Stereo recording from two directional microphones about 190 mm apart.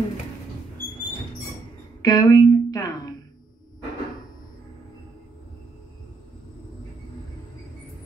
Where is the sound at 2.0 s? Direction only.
20° left (ahead or behind).